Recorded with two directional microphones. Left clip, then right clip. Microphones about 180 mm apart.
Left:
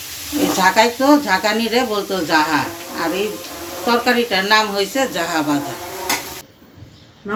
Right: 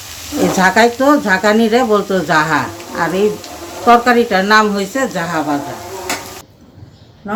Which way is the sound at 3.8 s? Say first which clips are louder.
Right 7 dB; 45° right (ahead or behind).